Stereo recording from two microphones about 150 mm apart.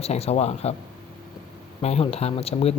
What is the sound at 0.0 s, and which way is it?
Speech, 45° left (ahead or behind).